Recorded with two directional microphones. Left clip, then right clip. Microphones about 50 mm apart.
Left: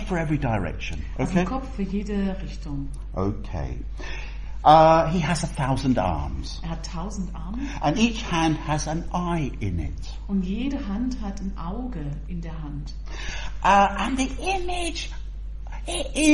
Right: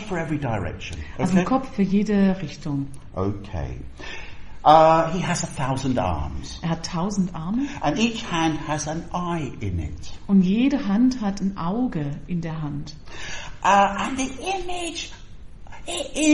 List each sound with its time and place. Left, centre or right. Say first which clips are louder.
0.1 s a man's voice: left 1 dB; left
1.5 s a woman's voice: right 7 dB; right
3.2 s a woman's voice: right 1 dB; centre
6.6 s a woman's voice: right 10 dB; right
7.5 s a woman's voice: right 1 dB; centre
10.4 s a woman's voice: right 7 dB; right
13.1 s a woman's voice: right 1 dB; centre